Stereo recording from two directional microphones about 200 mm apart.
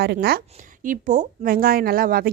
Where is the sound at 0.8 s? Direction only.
40° right (ahead or behind).